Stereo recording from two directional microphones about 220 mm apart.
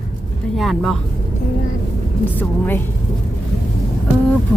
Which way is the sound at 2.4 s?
10° left (ahead or behind).